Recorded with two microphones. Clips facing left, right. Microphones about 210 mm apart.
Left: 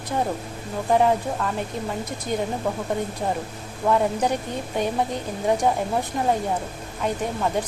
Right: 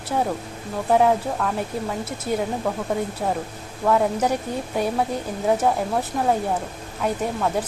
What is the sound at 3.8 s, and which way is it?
A woman's voice, 5° right (ahead or behind).